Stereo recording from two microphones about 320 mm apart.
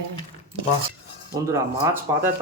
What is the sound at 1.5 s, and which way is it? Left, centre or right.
Speech, centre.